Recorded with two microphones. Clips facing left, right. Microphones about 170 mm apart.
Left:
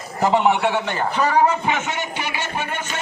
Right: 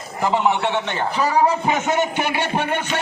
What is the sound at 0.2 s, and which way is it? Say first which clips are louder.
Speech: left 2 dB; 20° left (ahead or behind).